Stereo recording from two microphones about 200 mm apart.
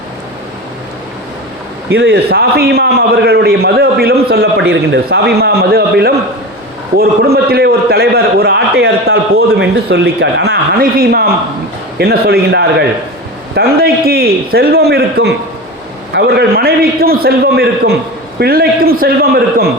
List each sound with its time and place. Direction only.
1.9 s a man's voice: 55° right (ahead or behind)